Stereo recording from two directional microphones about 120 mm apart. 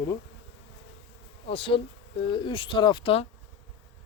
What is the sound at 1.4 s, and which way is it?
Speech, 50° left (ahead or behind).